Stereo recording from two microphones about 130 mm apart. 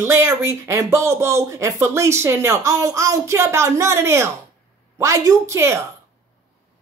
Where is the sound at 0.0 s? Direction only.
20° right (ahead or behind).